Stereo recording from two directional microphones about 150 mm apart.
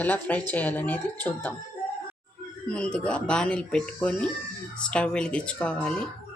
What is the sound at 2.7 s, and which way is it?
Speech, 5° left (ahead or behind).